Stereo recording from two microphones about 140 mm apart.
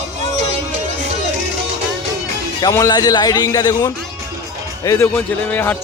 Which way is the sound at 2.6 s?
25° left (ahead or behind).